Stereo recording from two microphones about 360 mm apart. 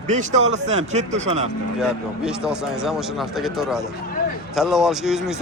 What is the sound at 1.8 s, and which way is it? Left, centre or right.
A man's voice, centre.